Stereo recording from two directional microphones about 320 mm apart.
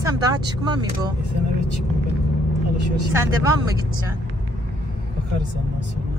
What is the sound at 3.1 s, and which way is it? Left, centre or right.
Speech, centre.